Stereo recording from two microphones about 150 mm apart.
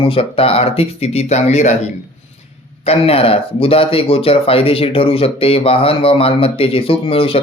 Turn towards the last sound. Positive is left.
turn(degrees=40)  # may be behind; listen again after turning